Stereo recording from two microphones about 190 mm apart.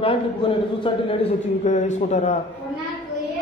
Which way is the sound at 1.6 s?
40° left (ahead or behind).